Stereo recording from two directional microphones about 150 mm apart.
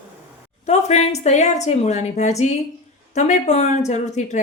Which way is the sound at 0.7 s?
45° left (ahead or behind).